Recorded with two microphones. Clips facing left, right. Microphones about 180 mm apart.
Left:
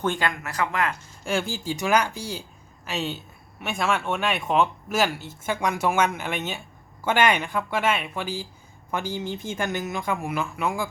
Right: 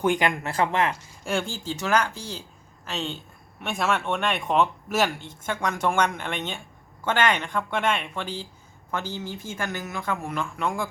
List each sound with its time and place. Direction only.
0.0 s speech: 15° right (ahead or behind)
0.4 s speech: 30° right (ahead or behind)
1.2 s speech: centre (ahead or behind)